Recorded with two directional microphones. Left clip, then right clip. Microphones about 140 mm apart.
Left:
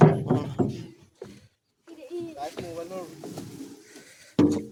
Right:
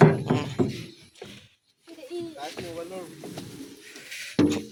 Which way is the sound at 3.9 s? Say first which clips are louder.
Right 11 dB; 25° left (ahead or behind).